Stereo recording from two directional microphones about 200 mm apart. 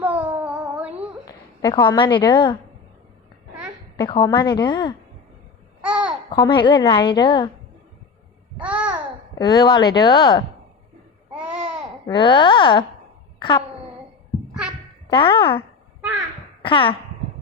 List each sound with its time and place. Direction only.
0.0 s humming: 5° right (ahead or behind)
1.2 s a woman's voice: 20° left (ahead or behind)
3.9 s a woman's voice: 25° left (ahead or behind)
5.8 s babbling: 5° right (ahead or behind)
6.3 s a woman's voice: 20° left (ahead or behind)
8.6 s babbling: 5° right (ahead or behind)
9.4 s a woman's voice: 20° left (ahead or behind)
11.3 s babbling: 5° right (ahead or behind)
12.0 s a woman's voice: 25° left (ahead or behind)
14.3 s a sound: 5° right (ahead or behind)
15.0 s speech: 25° left (ahead or behind)
16.6 s speech: 25° left (ahead or behind)